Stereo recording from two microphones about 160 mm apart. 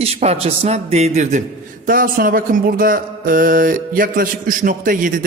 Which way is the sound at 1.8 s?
60° right (ahead or behind).